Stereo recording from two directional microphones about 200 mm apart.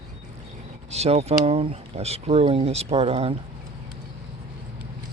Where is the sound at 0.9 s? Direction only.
30° right (ahead or behind).